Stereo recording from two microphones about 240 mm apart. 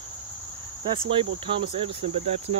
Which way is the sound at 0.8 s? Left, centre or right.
Right.